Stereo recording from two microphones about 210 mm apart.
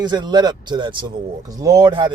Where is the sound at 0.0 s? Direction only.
20° right (ahead or behind).